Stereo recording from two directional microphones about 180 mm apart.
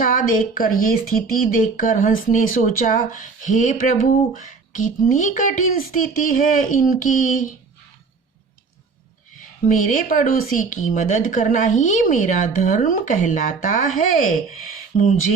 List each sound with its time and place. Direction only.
0.0 s speech: 50° left (ahead or behind)
9.6 s speech: 50° left (ahead or behind)